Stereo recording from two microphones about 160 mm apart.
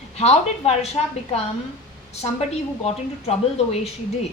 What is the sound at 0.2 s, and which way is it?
Speech, 40° left (ahead or behind).